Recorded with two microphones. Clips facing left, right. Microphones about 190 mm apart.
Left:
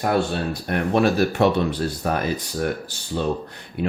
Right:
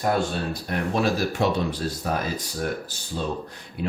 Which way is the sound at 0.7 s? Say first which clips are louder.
Left 5 dB; 60° left (ahead or behind).